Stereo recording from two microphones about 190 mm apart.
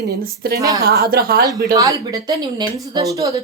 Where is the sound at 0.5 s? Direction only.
15° right (ahead or behind).